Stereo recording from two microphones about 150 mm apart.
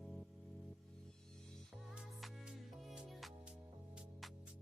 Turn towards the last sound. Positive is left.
turn(degrees=0)  # may be behind; listen again after turning